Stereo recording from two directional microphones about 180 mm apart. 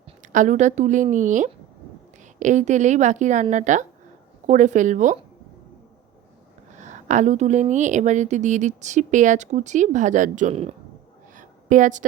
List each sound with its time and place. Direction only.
0.2 s a woman's voice: 45° right (ahead or behind)
6.7 s a woman's voice: 40° right (ahead or behind)
11.3 s a sound: 45° right (ahead or behind)